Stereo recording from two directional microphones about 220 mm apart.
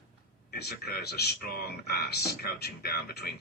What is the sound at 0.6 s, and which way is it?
Speech, 45° left (ahead or behind).